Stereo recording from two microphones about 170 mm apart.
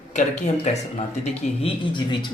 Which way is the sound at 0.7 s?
45° left (ahead or behind).